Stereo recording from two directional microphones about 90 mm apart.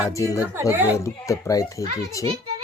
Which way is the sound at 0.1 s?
35° left (ahead or behind).